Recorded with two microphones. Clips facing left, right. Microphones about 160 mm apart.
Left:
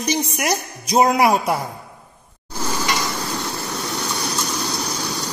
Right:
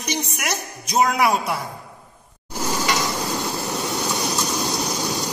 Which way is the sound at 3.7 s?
10° right (ahead or behind).